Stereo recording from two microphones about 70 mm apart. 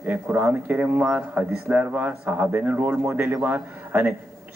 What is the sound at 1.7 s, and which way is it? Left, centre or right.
Speech, right.